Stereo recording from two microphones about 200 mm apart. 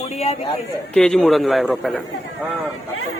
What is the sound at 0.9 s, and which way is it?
Speech, 5° left (ahead or behind).